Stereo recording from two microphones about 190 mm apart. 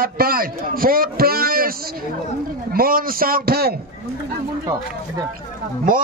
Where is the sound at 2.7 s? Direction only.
50° right (ahead or behind).